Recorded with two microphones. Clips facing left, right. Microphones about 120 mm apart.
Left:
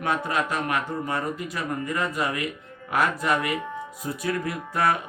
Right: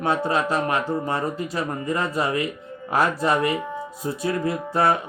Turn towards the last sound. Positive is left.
turn(degrees=-30)  # may be behind; listen again after turning